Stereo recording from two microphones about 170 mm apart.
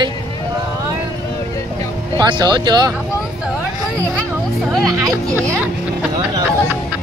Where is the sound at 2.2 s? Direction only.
25° right (ahead or behind).